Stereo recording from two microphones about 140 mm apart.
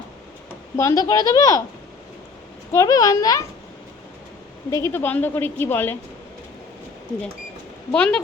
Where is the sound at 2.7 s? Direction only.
25° left (ahead or behind).